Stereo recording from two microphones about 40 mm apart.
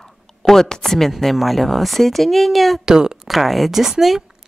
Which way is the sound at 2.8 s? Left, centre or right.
Centre.